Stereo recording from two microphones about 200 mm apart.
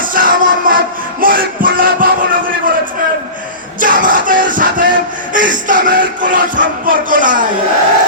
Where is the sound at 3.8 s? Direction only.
40° right (ahead or behind).